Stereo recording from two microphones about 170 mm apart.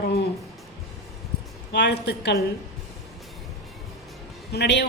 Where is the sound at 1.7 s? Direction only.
85° left.